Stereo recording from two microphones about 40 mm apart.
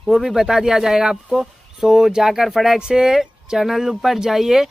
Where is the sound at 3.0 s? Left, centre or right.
Centre.